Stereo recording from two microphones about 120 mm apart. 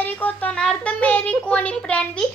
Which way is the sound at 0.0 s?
15° left (ahead or behind).